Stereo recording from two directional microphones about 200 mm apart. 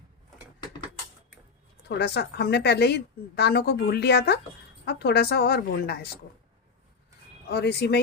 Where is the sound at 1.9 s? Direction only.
55° left (ahead or behind).